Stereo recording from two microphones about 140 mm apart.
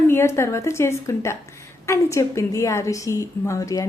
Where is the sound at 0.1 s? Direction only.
20° left (ahead or behind).